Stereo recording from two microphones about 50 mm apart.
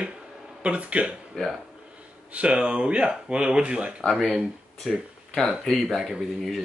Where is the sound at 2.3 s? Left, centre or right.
Right.